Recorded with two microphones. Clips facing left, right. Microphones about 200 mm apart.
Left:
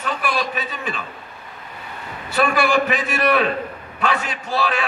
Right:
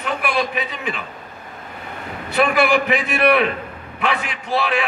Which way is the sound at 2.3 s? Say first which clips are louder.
Right 1 dB; 20° right (ahead or behind).